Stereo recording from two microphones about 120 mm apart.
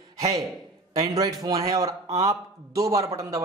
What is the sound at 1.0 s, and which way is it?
A man's voice, 30° right (ahead or behind).